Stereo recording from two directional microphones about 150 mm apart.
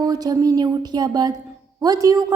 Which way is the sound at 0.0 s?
25° right (ahead or behind).